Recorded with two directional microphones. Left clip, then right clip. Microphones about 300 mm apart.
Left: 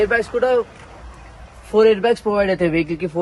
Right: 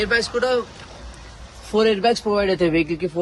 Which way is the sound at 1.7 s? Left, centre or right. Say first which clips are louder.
Left 4 dB; centre.